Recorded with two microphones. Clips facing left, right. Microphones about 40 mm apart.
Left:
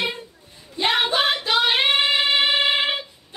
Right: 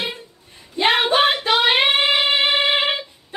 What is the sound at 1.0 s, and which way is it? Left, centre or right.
Child singing, right.